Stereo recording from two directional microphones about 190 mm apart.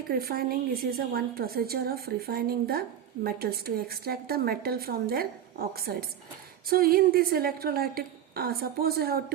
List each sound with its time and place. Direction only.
0.1 s a woman's voice: 50° right (ahead or behind)